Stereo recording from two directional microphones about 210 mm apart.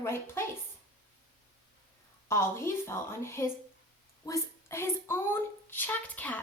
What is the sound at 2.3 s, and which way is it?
A woman's voice, 10° left (ahead or behind).